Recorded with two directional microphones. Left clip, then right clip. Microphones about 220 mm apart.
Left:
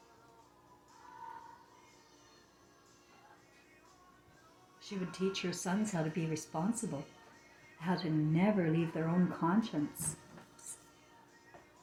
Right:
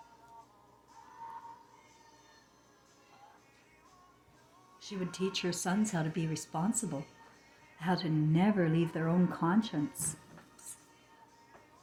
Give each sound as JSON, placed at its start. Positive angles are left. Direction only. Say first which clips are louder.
{"t": 4.8, "sound": "speech", "louder": "right 1 dB", "side_deg": -40}